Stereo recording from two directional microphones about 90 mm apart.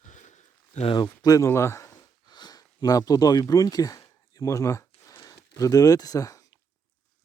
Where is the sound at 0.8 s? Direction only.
70° left (ahead or behind).